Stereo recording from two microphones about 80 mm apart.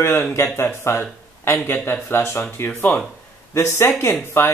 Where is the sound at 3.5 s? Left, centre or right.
Left.